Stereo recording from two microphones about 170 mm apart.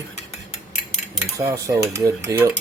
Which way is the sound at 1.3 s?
20° right (ahead or behind).